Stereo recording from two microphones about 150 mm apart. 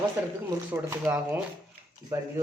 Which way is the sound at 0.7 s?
15° right (ahead or behind).